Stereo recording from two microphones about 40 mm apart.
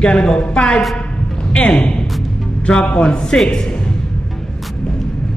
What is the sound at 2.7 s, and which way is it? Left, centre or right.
Speech, left.